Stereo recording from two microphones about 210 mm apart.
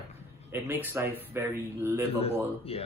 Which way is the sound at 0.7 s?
10° right (ahead or behind).